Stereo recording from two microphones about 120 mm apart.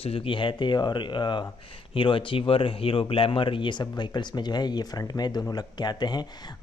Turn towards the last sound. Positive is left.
turn(degrees=35)  # may be behind; listen again after turning